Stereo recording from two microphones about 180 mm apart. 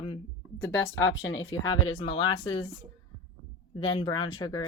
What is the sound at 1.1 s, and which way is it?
Speech, 90° left.